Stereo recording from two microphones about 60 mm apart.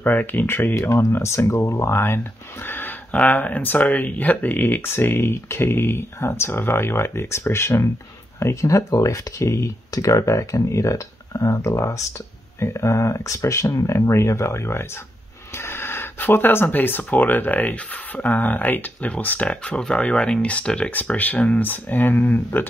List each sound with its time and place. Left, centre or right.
0.0 s speech: left
8.4 s speech: left; by 20.9 s centre
20.9 s speech: left